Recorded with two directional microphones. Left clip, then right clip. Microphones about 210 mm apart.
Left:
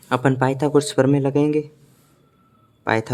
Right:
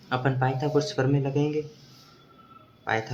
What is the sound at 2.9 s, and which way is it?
Speech, 55° left (ahead or behind).